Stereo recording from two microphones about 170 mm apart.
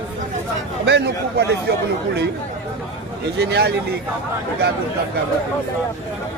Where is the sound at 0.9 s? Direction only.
85° right.